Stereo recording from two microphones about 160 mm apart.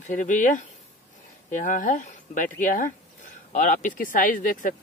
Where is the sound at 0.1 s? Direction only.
50° left (ahead or behind).